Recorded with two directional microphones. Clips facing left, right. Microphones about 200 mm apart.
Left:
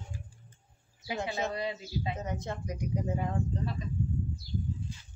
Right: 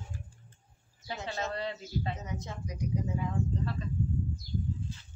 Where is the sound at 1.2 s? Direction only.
10° left (ahead or behind).